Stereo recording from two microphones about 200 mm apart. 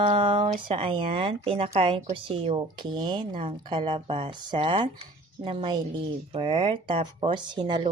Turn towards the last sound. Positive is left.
turn(degrees=-25)  # may be behind; listen again after turning